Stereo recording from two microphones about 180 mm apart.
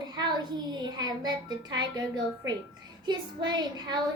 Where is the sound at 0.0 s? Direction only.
25° right (ahead or behind).